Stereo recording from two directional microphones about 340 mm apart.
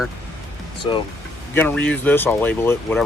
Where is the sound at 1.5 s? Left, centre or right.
Centre.